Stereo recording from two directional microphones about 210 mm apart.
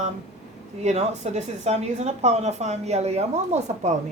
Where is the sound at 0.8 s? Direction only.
30° right (ahead or behind).